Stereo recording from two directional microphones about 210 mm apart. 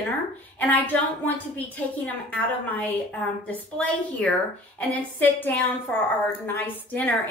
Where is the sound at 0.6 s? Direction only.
10° left (ahead or behind).